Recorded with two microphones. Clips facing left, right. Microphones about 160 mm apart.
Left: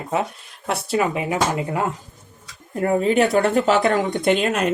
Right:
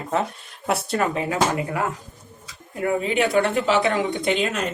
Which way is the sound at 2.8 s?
40° left (ahead or behind).